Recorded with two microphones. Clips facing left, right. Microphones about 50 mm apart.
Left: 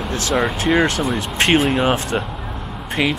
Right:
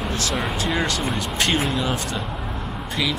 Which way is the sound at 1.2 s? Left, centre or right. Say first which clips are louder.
Left 7 dB; left.